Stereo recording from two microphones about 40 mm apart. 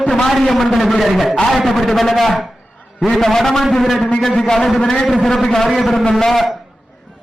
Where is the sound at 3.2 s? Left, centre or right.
Centre.